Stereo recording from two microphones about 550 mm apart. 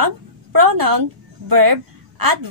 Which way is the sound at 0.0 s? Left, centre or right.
Right.